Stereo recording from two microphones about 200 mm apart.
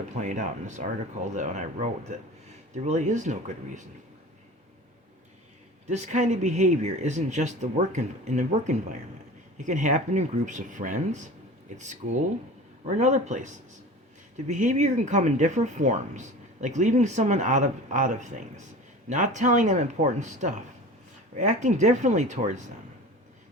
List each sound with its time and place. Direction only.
0.2 s speech: 35° right (ahead or behind)
5.9 s speech: 35° right (ahead or behind)
12.8 s speech: 35° right (ahead or behind)